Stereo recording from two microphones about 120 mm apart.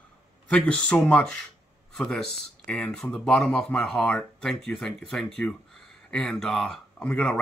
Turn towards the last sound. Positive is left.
turn(degrees=10)  # may be behind; listen again after turning